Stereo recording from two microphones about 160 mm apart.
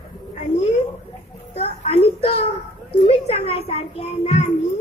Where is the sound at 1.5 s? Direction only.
40° left (ahead or behind).